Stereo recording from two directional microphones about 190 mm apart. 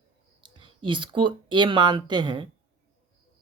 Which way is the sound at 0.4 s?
25° right (ahead or behind).